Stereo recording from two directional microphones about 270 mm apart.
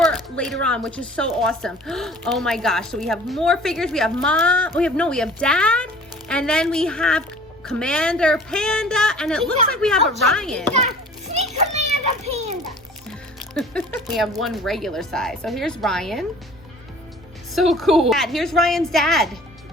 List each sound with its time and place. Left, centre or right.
0.0 s a sound: centre
0.6 s a woman's voice: centre
11.3 s a child's voice: right
13.5 s a woman's voice: centre
17.5 s a woman's voice: centre